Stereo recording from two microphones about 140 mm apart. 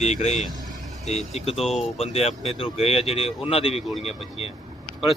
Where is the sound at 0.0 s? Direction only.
50° left (ahead or behind).